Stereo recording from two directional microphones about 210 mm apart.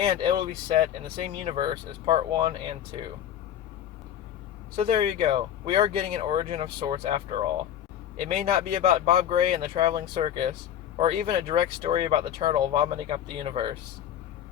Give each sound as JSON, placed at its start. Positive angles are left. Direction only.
{"t": 0.0, "sound": "speech", "side_deg": -20}
{"t": 4.8, "sound": "speech", "side_deg": -25}
{"t": 8.3, "sound": "speech", "side_deg": -30}